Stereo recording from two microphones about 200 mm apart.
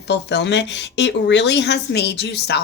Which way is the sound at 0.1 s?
60° left (ahead or behind).